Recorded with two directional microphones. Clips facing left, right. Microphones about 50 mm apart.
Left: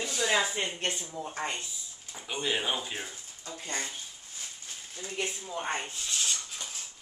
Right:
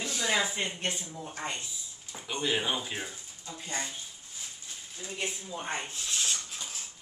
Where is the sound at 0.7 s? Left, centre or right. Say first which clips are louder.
Left 1 dB; left.